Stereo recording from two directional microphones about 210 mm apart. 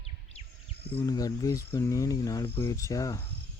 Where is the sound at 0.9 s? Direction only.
15° left (ahead or behind).